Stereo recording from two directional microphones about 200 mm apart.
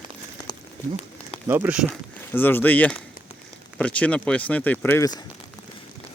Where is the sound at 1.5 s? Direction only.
10° right (ahead or behind).